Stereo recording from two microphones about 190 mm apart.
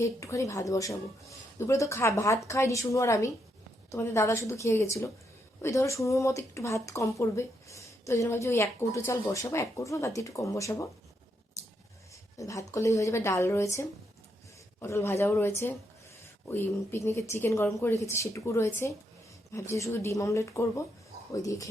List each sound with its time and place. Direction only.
0.0 s speech: 15° left (ahead or behind)
12.4 s speech: 15° left (ahead or behind)